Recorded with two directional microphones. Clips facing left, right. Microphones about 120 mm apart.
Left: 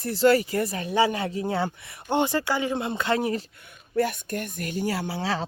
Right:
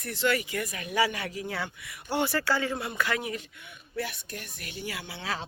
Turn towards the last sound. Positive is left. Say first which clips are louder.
# left 8 dB
turn(degrees=35)  # may be behind; listen again after turning